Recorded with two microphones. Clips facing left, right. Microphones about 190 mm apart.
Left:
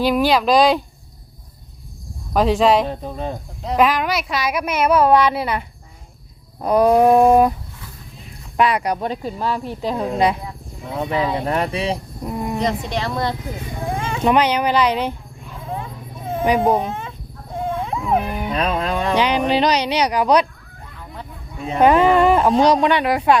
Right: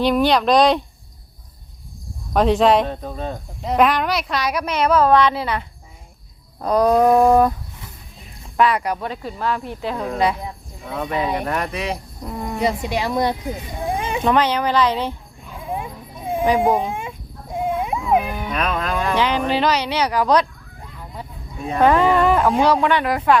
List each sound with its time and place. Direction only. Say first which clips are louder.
0.0 s speech: even; 5° left (ahead or behind)
2.3 s speech: even; centre (ahead or behind)
3.0 s speech: left 1 dB; 15° left (ahead or behind)
3.6 s speech: even; centre (ahead or behind)
8.5 s speech: even; 15° left (ahead or behind)
12.2 s speech: left 4 dB; 15° left (ahead or behind)
12.5 s speech: right 3 dB; 10° right (ahead or behind)
13.9 s a sound: right 2 dB; 15° right (ahead or behind)
14.3 s speech: left 2 dB; 15° left (ahead or behind)
15.6 s a sound: right 2 dB; 15° right (ahead or behind)
16.6 s dog: even; 15° right (ahead or behind)
18.5 s speech: left 2 dB; 30° left (ahead or behind)
19.1 s speech: left 3 dB; 15° left (ahead or behind)
21.7 s speech: left 2 dB; 20° left (ahead or behind)